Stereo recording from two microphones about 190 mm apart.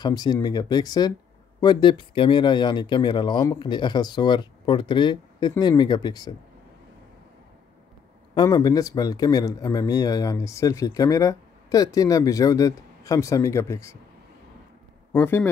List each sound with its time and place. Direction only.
0.0 s speech: 20° left (ahead or behind)
8.4 s speech: 20° left (ahead or behind)
15.1 s speech: 10° left (ahead or behind)